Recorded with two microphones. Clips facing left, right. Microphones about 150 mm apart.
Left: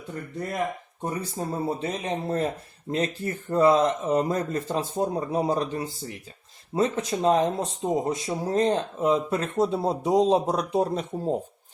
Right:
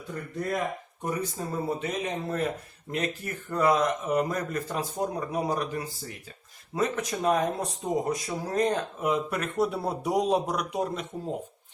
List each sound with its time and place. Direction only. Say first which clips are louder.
1.0 s speech: left 1 dB; 30° left (ahead or behind)